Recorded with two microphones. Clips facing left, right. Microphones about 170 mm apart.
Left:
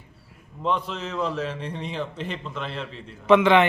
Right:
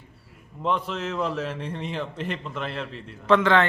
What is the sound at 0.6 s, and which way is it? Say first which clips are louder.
A man's voice: even; 5° right (ahead or behind).